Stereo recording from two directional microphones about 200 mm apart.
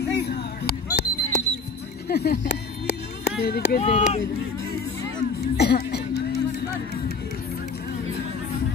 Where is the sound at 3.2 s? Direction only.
50° left (ahead or behind).